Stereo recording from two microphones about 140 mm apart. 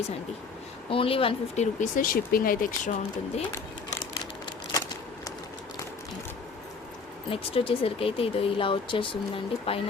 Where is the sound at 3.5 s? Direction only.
25° left (ahead or behind).